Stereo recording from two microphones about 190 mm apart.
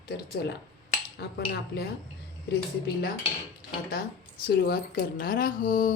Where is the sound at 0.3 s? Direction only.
55° left (ahead or behind).